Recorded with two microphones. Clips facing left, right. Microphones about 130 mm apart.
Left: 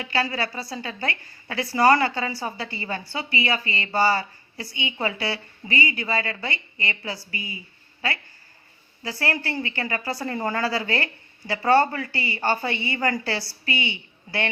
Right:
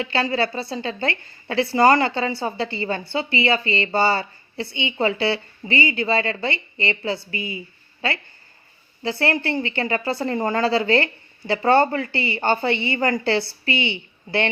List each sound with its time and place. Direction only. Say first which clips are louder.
0.0 s a woman's voice: right 4 dB; 25° right (ahead or behind)